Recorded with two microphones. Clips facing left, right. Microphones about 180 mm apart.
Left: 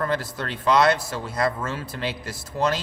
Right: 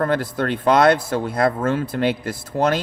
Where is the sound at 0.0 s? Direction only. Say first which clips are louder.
Right 6 dB; 55° right (ahead or behind).